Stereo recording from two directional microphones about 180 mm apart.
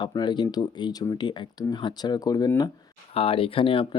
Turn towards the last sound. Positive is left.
turn(degrees=30)  # may be behind; listen again after turning